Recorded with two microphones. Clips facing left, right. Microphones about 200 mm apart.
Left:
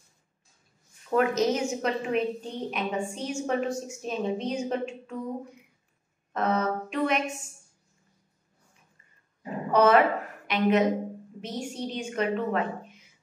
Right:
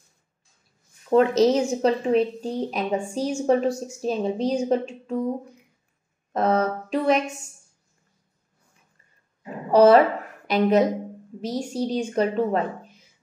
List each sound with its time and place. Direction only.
1.1 s a woman's voice: 30° right (ahead or behind)
6.3 s a woman's voice: 35° right (ahead or behind)
9.7 s a woman's voice: 35° right (ahead or behind)